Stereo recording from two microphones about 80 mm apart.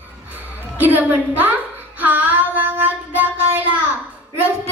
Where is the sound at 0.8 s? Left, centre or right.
Right.